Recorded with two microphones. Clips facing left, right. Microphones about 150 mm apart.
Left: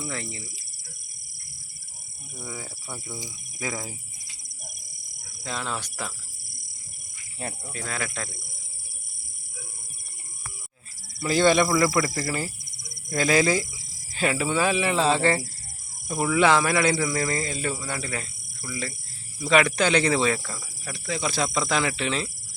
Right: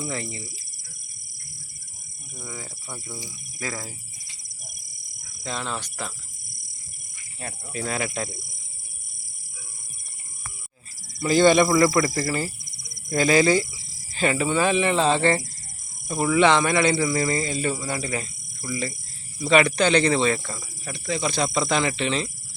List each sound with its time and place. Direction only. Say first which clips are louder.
0.0 s speech: right 3 dB; centre (ahead or behind)
2.4 s speech: left 1 dB; 5° left (ahead or behind)
3.2 s cricket: even; 20° left (ahead or behind)
3.8 s cricket: left 1 dB; centre (ahead or behind)
5.4 s speech: right 1 dB; 5° left (ahead or behind)
7.7 s speech: right 8 dB; 20° right (ahead or behind)
11.2 s speech: right 3 dB; centre (ahead or behind)
16.9 s speech: right 3 dB; 5° right (ahead or behind)
19.4 s speech: right 2 dB; 5° left (ahead or behind)
20.4 s speech: right 2 dB; 15° right (ahead or behind)
21.1 s speech: right 2 dB; 5° left (ahead or behind)